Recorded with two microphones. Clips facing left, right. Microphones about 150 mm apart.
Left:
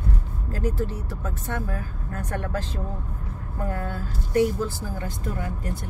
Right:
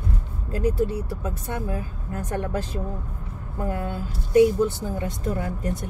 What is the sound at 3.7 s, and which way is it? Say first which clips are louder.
Speech: right 3 dB; 15° right (ahead or behind).